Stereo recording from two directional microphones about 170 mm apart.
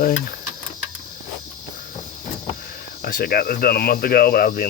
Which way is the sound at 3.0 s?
60° left (ahead or behind).